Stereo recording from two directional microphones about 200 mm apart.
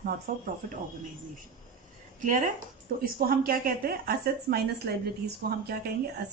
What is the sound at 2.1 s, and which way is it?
A woman's voice, 40° right (ahead or behind).